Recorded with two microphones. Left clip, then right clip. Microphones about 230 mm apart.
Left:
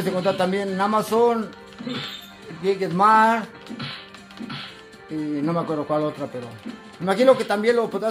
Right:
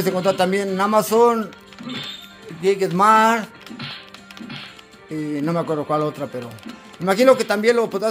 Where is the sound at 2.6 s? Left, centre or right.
Right.